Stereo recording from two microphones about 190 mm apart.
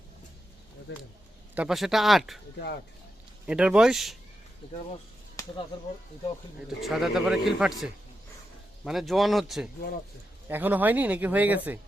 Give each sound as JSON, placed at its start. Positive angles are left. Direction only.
{"t": 0.9, "sound": "speech", "side_deg": 65}
{"t": 1.5, "sound": "a man's voice", "side_deg": 0}
{"t": 3.4, "sound": "a man's voice", "side_deg": -5}
{"t": 6.8, "sound": "a man's voice", "side_deg": 0}